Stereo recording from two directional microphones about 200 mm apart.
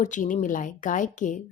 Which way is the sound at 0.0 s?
40° left (ahead or behind).